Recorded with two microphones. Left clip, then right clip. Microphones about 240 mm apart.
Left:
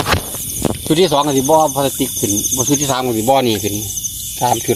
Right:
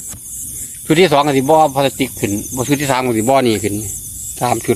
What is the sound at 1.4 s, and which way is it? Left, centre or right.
Speech, right.